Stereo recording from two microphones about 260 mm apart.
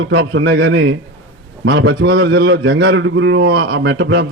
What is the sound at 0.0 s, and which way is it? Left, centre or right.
A man's voice, right.